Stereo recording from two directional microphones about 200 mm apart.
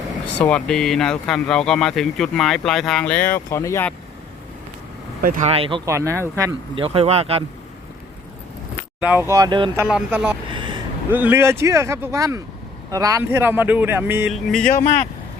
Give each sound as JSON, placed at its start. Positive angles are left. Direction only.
{"t": 0.3, "sound": "speech", "side_deg": 5}
{"t": 5.2, "sound": "speech", "side_deg": -45}
{"t": 5.5, "sound": "speech", "side_deg": -25}
{"t": 5.9, "sound": "speech", "side_deg": -15}
{"t": 6.7, "sound": "speech", "side_deg": -30}
{"t": 9.0, "sound": "speech", "side_deg": -10}
{"t": 9.8, "sound": "speech", "side_deg": -5}
{"t": 10.5, "sound": "vehicle", "side_deg": -25}
{"t": 11.1, "sound": "speech", "side_deg": -10}
{"t": 14.7, "sound": "speech", "side_deg": 40}